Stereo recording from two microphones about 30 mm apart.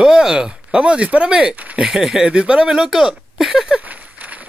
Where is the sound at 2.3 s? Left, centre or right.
Right.